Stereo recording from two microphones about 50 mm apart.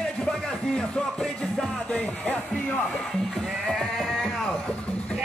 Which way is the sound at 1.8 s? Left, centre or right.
Left.